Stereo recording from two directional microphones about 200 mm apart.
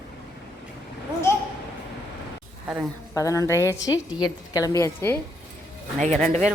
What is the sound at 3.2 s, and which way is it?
Speech, 15° left (ahead or behind).